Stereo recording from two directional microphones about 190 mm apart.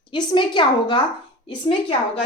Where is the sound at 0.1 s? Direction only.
25° left (ahead or behind).